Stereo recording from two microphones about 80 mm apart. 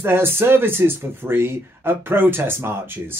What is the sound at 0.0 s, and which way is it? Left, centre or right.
Speech, right.